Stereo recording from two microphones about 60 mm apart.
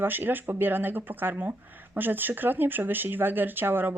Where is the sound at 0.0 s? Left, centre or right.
Right.